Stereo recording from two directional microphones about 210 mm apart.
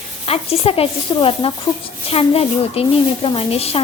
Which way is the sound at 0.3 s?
30° left (ahead or behind).